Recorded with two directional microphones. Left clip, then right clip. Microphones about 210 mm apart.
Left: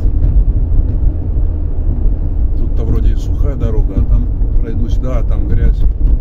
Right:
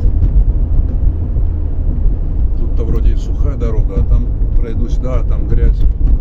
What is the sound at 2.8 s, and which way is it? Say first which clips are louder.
Vehicle: even; 30° left (ahead or behind).